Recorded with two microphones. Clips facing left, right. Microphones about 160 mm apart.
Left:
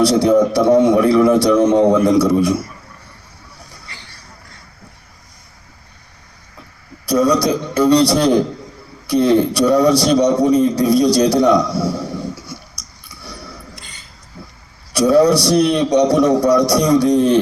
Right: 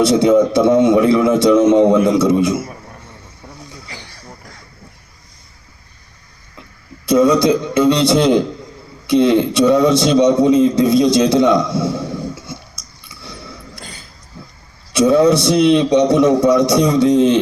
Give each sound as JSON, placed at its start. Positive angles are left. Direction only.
{"t": 0.0, "sound": "a man's voice", "side_deg": -20}
{"t": 7.0, "sound": "a man's voice", "side_deg": -25}
{"t": 14.9, "sound": "a man's voice", "side_deg": -25}